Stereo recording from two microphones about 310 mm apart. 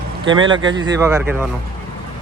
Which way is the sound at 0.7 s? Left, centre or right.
Centre.